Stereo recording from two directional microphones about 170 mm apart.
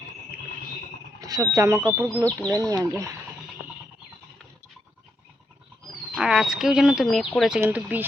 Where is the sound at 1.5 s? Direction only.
15° right (ahead or behind).